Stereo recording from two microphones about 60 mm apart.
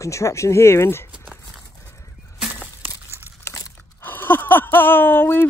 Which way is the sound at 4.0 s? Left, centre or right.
Left.